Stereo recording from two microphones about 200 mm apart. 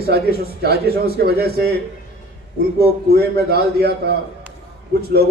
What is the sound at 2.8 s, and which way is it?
Speech, 50° right (ahead or behind).